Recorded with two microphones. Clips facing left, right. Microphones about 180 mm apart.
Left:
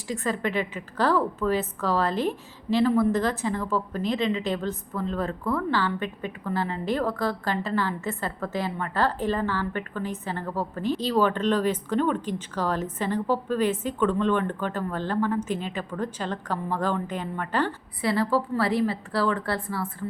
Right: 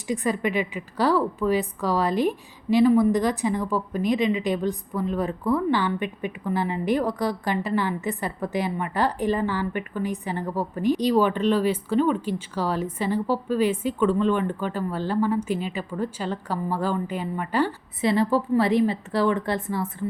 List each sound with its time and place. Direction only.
0.1 s a woman's voice: 15° right (ahead or behind)